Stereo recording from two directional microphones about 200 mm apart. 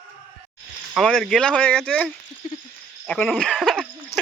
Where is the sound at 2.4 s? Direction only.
40° left (ahead or behind).